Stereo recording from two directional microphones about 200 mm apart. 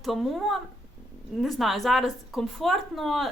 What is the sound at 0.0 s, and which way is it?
A woman's voice, centre (ahead or behind).